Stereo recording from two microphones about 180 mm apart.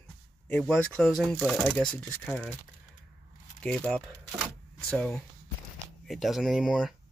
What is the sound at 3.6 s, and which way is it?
Speech, 5° left (ahead or behind).